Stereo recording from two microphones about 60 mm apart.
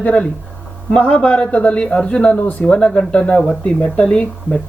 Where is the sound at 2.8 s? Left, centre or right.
Centre.